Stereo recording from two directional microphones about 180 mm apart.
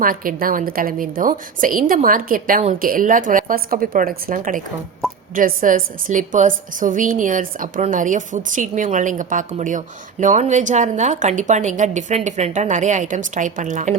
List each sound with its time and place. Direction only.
0.0 s a woman's voice: 50° right (ahead or behind)